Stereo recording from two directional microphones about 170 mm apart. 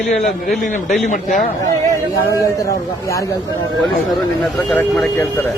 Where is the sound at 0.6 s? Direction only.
50° left (ahead or behind).